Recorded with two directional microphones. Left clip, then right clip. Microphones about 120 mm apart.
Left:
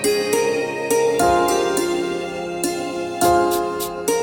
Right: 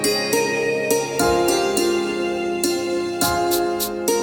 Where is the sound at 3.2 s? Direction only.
Centre (ahead or behind).